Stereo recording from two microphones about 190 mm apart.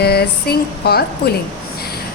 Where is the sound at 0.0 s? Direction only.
55° left (ahead or behind).